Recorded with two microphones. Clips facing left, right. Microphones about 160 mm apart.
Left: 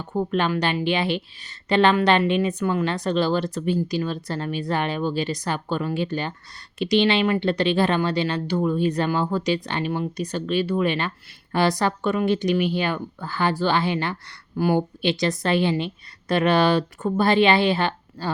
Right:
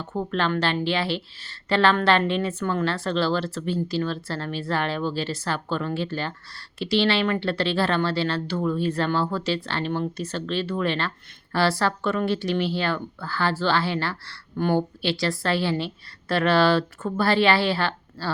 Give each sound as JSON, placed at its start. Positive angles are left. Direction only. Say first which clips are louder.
{"t": 0.0, "sound": "speech", "louder": "left 3 dB", "side_deg": 15}